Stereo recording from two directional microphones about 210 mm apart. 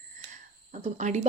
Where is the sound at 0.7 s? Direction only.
35° right (ahead or behind).